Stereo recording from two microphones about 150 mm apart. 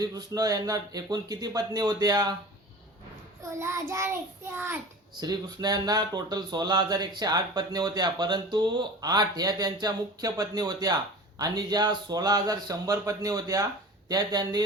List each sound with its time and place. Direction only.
0.0 s speech: 25° right (ahead or behind)
3.6 s child singing: 20° right (ahead or behind)
5.2 s speech: 25° right (ahead or behind)